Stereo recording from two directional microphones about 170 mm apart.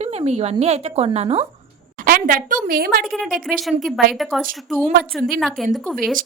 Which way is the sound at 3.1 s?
Centre (ahead or behind).